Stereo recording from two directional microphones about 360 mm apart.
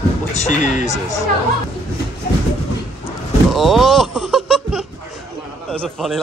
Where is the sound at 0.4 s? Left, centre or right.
Left.